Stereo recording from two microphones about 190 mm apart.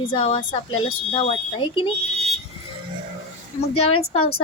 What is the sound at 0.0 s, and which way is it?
Speech, 30° left (ahead or behind).